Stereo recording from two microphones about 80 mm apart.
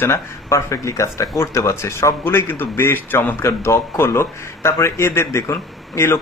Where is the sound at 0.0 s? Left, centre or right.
Left.